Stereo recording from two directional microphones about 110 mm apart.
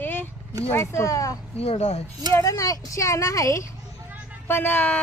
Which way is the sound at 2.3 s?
30° left (ahead or behind).